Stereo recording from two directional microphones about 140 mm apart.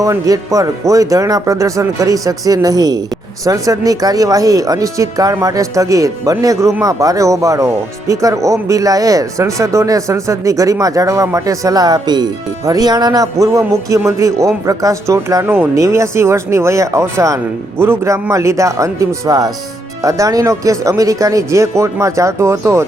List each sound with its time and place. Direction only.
0.0 s speech: 25° right (ahead or behind)